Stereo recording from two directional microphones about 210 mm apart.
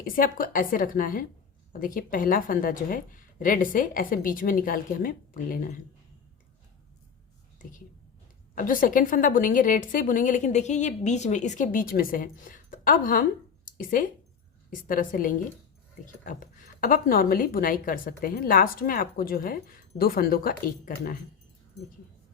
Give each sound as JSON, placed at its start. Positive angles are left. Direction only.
{"t": 0.0, "sound": "a woman's voice", "side_deg": 40}
{"t": 8.5, "sound": "a woman's voice", "side_deg": 40}